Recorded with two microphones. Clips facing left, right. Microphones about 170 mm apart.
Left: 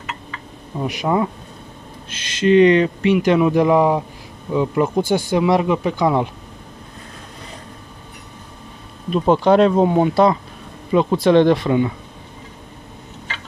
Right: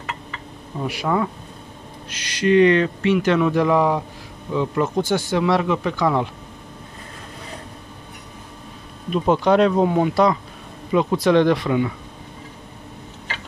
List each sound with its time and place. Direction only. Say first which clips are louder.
0.8 s speech: left 2 dB; 20° left (ahead or behind)
9.1 s speech: left 3 dB; 30° left (ahead or behind)